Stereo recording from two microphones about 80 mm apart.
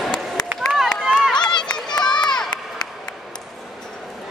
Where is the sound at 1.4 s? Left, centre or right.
Left.